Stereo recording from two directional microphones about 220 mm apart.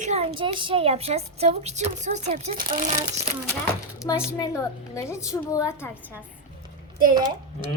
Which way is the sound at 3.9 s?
15° left (ahead or behind).